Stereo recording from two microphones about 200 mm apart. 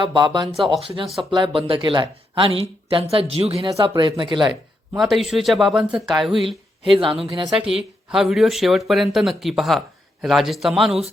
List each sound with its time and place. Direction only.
0.0 s speech: 25° right (ahead or behind)
0.4 s speech: centre (ahead or behind)
1.3 s speech: 25° right (ahead or behind)
4.9 s speech: centre (ahead or behind)
6.9 s speech: 25° right (ahead or behind)
8.1 s speech: centre (ahead or behind)